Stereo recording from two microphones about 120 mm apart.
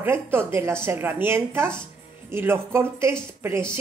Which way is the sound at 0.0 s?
20° right (ahead or behind).